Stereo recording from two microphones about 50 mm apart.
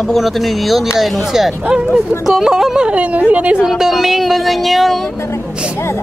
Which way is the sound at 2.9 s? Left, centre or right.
Right.